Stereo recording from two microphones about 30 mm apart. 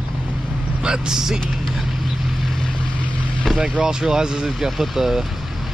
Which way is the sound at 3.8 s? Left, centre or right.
Right.